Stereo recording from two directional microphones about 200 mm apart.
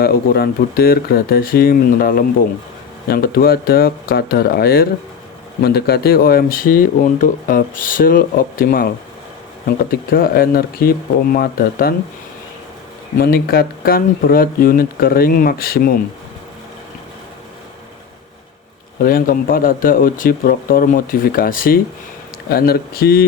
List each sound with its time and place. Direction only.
0.0 s speech: 50° left (ahead or behind)
13.1 s speech: 50° left (ahead or behind)
19.0 s speech: 45° left (ahead or behind)